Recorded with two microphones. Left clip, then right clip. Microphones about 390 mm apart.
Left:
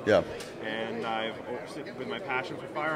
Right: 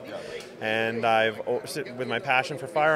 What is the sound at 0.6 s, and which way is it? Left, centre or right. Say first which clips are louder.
Speech: right 9 dB; right.